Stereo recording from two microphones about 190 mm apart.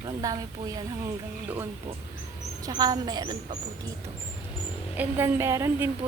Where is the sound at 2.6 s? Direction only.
20° right (ahead or behind).